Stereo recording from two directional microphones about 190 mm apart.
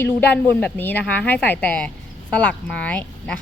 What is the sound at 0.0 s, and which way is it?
A woman's voice, 10° left (ahead or behind).